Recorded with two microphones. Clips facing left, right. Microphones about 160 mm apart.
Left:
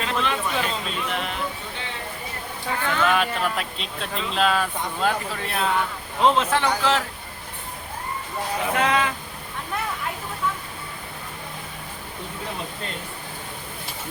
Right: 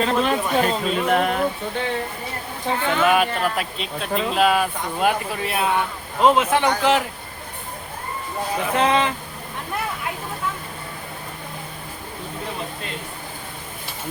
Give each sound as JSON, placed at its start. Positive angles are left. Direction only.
{"t": 0.0, "sound": "speech", "side_deg": -40}
{"t": 2.6, "sound": "speech", "side_deg": -20}
{"t": 4.1, "sound": "speech", "side_deg": -50}
{"t": 4.4, "sound": "speech", "side_deg": -10}
{"t": 8.7, "sound": "speech", "side_deg": -25}